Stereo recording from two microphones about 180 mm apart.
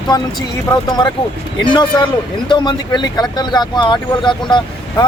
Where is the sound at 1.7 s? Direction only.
25° left (ahead or behind).